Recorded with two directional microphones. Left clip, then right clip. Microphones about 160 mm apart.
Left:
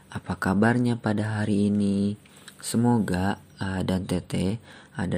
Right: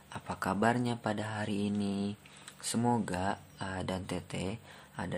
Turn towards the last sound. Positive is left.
turn(degrees=25)  # may be behind; listen again after turning